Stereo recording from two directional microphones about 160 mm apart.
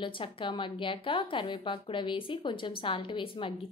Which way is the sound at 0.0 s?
30° left (ahead or behind).